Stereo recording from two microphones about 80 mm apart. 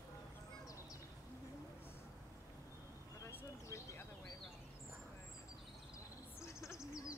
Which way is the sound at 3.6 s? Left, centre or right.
Left.